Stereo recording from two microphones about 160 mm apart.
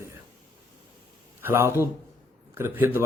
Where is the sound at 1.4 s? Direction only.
15° right (ahead or behind).